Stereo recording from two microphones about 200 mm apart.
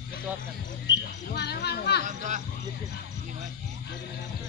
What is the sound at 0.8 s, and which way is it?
Speech, 55° left (ahead or behind).